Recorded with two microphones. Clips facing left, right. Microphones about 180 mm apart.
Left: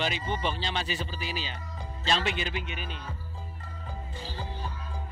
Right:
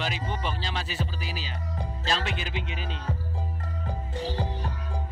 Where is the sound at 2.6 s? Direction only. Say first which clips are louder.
Right 3 dB; 90° right.